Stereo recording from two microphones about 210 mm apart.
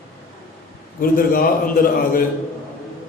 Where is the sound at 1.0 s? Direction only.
45° left (ahead or behind).